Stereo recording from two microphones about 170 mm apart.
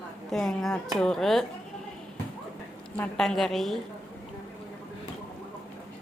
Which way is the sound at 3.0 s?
Centre (ahead or behind).